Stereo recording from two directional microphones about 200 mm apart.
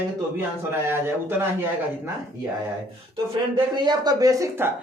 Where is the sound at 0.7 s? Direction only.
10° right (ahead or behind).